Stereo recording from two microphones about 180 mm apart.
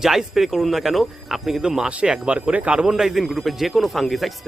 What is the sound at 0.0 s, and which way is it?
Speech, centre (ahead or behind).